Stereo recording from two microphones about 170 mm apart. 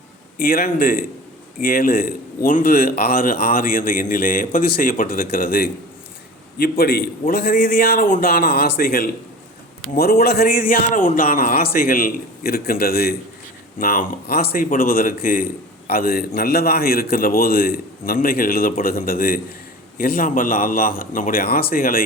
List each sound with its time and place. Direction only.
0.3 s a man's voice: 60° left (ahead or behind)